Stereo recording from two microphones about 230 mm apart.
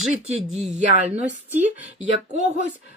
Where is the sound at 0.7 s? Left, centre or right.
Centre.